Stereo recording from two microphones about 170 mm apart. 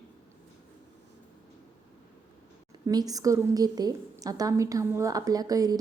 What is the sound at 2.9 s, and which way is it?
A woman's voice, 20° right (ahead or behind).